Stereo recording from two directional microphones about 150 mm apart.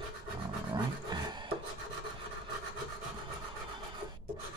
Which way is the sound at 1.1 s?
30° right (ahead or behind).